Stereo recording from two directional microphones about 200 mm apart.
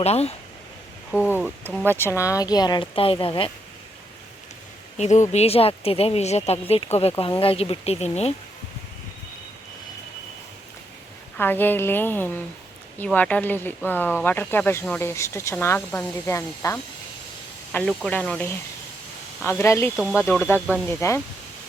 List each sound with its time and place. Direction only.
0.0 s speech: 30° left (ahead or behind)
1.1 s speech: 5° right (ahead or behind)
2.0 s speech: 15° left (ahead or behind)
4.9 s speech: 35° left (ahead or behind)
11.3 s speech: 10° left (ahead or behind)